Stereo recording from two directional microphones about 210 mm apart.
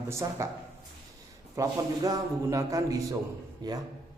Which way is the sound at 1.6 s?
15° right (ahead or behind).